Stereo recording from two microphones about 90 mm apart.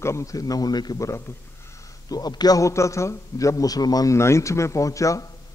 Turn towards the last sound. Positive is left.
turn(degrees=35)  # may be behind; listen again after turning